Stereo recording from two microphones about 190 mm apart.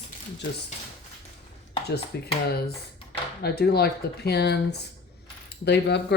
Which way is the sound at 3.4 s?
55° left (ahead or behind).